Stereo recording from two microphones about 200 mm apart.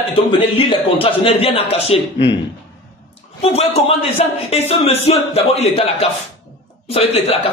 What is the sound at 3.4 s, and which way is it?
A man's voice, 30° left (ahead or behind).